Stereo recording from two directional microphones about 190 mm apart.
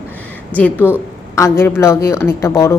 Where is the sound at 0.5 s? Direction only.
10° left (ahead or behind).